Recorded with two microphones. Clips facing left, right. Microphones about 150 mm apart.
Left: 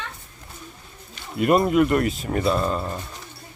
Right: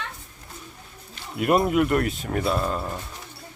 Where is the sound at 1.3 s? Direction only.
Centre (ahead or behind).